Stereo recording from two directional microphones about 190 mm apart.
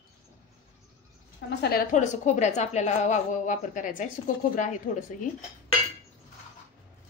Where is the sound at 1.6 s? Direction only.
50° left (ahead or behind).